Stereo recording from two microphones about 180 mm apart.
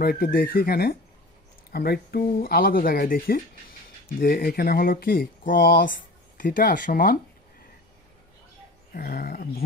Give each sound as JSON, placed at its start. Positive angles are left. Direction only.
{"t": 0.0, "sound": "speech", "side_deg": 55}
{"t": 8.9, "sound": "speech", "side_deg": 55}